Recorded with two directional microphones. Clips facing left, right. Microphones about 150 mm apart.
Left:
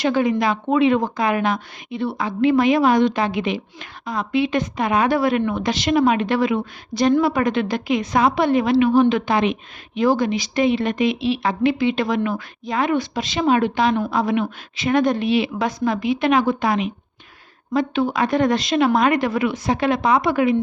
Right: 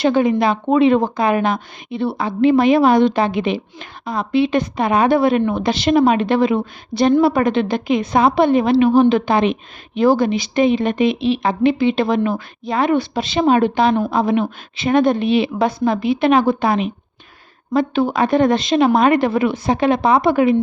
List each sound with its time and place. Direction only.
0.0 s a woman's voice: 25° right (ahead or behind)